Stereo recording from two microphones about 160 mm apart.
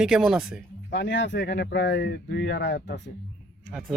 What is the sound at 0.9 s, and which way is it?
Speech, 90° left.